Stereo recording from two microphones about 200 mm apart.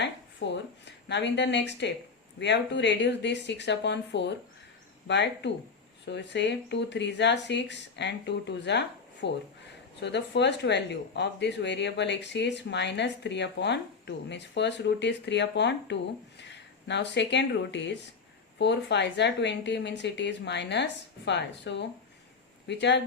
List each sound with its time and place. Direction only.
0.4 s speech: 65° left (ahead or behind)